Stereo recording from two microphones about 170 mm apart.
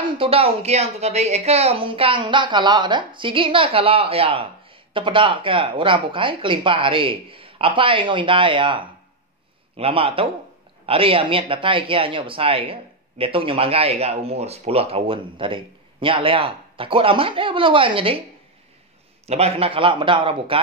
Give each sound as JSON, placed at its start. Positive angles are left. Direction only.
{"t": 0.2, "sound": "speech", "side_deg": -35}
{"t": 19.2, "sound": "speech", "side_deg": -35}